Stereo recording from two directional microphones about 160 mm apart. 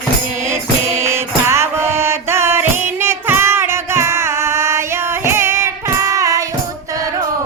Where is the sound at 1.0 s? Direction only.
15° right (ahead or behind).